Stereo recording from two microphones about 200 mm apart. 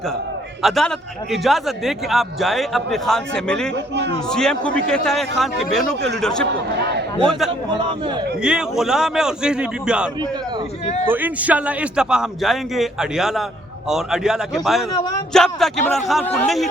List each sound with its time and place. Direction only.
0.6 s a man's voice: centre (ahead or behind)
6.2 s a man's voice: 5° left (ahead or behind)
6.5 s speech: 55° right (ahead or behind)
7.2 s a man's voice: centre (ahead or behind)